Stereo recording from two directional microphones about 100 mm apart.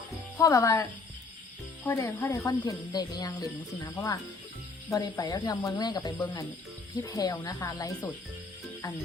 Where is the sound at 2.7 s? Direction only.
40° left (ahead or behind).